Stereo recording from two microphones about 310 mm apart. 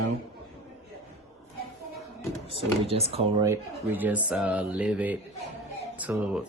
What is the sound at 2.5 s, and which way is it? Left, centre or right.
Speech, centre.